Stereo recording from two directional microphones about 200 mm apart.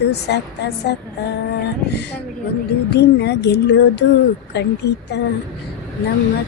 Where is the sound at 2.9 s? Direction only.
55° left (ahead or behind).